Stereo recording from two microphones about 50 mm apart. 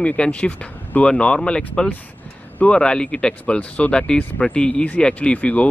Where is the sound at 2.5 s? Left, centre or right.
Left.